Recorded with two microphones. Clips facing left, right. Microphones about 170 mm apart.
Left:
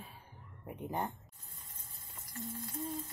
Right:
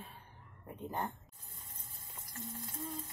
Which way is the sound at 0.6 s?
15° left (ahead or behind).